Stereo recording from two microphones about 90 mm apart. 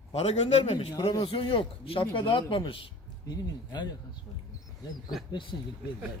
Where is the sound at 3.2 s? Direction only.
50° left (ahead or behind).